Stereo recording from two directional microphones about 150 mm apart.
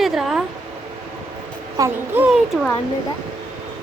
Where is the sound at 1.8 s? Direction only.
25° right (ahead or behind).